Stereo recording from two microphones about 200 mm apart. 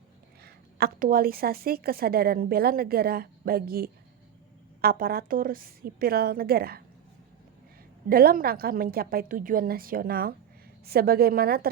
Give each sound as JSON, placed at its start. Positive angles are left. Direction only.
{"t": 0.4, "sound": "a woman's voice", "side_deg": -45}
{"t": 8.1, "sound": "a woman's voice", "side_deg": -45}